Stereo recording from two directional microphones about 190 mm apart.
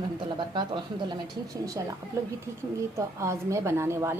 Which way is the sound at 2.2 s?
15° right (ahead or behind).